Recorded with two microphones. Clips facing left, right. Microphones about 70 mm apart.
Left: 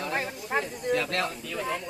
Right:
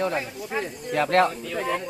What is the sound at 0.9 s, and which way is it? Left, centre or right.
Speech, right.